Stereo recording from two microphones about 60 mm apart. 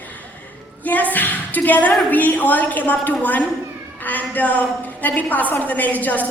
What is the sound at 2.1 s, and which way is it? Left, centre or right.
A woman's voice, left.